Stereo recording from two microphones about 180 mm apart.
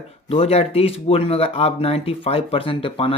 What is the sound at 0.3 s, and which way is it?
Speech, 35° left (ahead or behind).